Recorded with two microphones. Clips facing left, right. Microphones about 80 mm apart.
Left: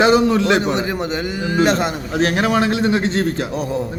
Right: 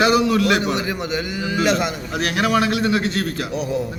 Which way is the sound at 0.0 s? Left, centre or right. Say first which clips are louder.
Left 3 dB; left.